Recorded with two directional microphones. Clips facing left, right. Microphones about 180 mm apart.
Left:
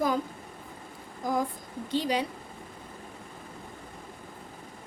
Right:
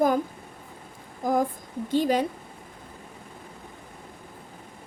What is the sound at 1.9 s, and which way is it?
Speech, 50° right (ahead or behind).